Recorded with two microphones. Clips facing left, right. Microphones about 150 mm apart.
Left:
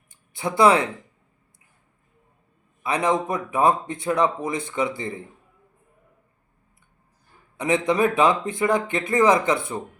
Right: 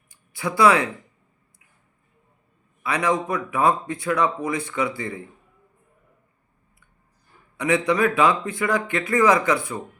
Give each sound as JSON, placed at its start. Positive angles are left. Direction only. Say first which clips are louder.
{"t": 0.3, "sound": "speech", "louder": "left 1 dB", "side_deg": 25}
{"t": 2.8, "sound": "speech", "louder": "left 1 dB", "side_deg": 25}
{"t": 7.5, "sound": "speech", "louder": "even", "side_deg": 25}